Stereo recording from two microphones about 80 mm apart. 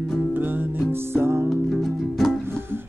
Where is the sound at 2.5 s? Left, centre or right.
Right.